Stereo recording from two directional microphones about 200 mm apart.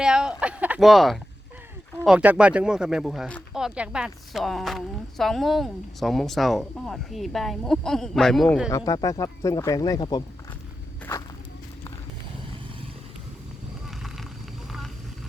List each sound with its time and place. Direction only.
0.0 s speech: 5° right (ahead or behind)
8.7 s speech: 15° left (ahead or behind)
13.8 s a sound: centre (ahead or behind)